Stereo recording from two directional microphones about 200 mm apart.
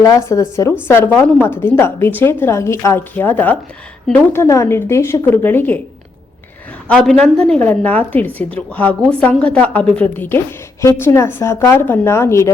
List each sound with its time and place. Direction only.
0.0 s a woman's voice: 15° left (ahead or behind)
6.8 s a woman's voice: centre (ahead or behind)